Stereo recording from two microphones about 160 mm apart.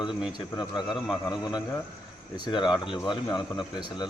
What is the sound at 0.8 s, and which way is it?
Speech, centre (ahead or behind).